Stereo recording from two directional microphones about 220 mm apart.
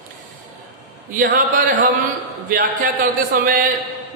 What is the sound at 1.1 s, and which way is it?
Music, 40° right (ahead or behind).